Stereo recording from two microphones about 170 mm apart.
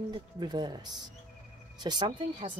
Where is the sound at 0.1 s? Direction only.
25° right (ahead or behind).